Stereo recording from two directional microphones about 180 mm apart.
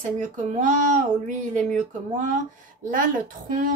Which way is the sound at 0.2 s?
45° right (ahead or behind).